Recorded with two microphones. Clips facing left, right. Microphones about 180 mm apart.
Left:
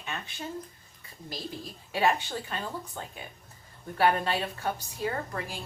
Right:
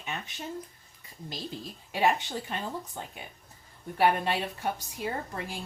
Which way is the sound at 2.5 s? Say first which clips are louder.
Right 1 dB; 15° right (ahead or behind).